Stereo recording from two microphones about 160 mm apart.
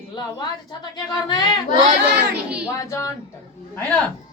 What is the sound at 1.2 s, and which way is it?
Speech, 25° left (ahead or behind).